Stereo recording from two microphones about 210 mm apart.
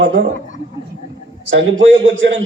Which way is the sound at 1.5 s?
65° right (ahead or behind).